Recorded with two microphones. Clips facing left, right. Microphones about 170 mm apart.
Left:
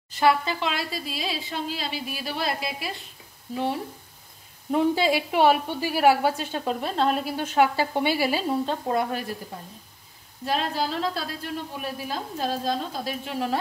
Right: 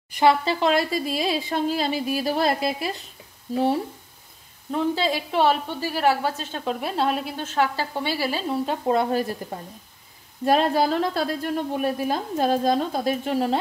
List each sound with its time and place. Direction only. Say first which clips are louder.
0.1 s speech: right 3 dB; 25° right (ahead or behind)
0.6 s a woman's voice: right 8 dB; 45° right (ahead or behind)
4.6 s a woman's voice: left 2 dB; 10° left (ahead or behind)
6.7 s speech: right 1 dB; 5° right (ahead or behind)
7.3 s a woman's voice: left 2 dB; 15° left (ahead or behind)
8.6 s speech: right 3 dB; 20° right (ahead or behind)
10.4 s a woman's voice: right 7 dB; 50° right (ahead or behind)